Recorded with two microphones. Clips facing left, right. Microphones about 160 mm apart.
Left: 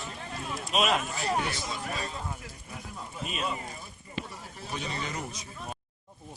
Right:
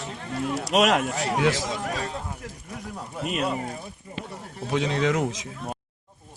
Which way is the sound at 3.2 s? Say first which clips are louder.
Right 7 dB; 60° right (ahead or behind).